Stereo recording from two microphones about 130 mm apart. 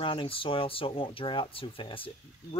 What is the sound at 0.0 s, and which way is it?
Speech, 45° left (ahead or behind).